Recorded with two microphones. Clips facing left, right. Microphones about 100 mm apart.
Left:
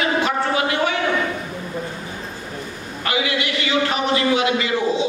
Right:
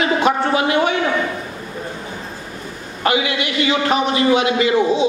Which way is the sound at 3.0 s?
25° right (ahead or behind).